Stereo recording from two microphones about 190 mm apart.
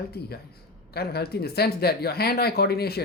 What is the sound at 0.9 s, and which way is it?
Speech, 55° left (ahead or behind).